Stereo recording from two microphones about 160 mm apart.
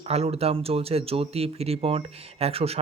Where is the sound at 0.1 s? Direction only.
40° right (ahead or behind).